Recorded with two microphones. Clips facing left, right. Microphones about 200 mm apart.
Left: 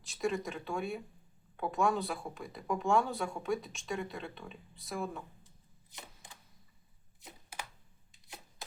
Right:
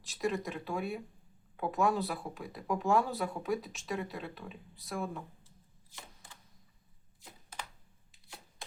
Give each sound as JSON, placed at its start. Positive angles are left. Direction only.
{"t": 0.0, "sound": "speech", "side_deg": 0}
{"t": 5.9, "sound": "camera", "side_deg": 20}